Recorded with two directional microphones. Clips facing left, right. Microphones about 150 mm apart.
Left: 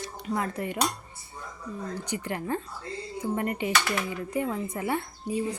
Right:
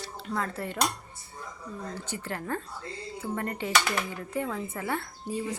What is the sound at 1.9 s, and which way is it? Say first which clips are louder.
A woman's voice: left 5 dB; 15° left (ahead or behind).